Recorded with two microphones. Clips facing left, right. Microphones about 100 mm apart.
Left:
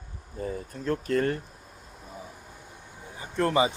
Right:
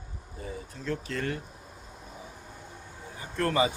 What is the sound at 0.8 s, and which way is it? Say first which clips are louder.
Speech: left 6 dB; 45° left (ahead or behind).